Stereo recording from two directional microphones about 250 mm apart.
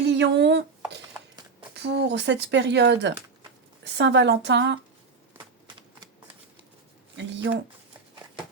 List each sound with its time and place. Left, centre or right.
0.1 s a sound: right
1.7 s speech: right
7.2 s speech: right